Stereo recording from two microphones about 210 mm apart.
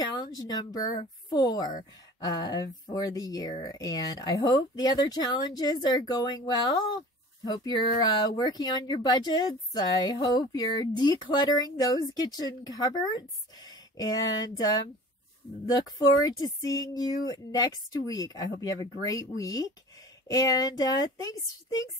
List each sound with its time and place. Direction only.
0.0 s a woman's voice: 20° left (ahead or behind)
16.3 s speech: 15° left (ahead or behind)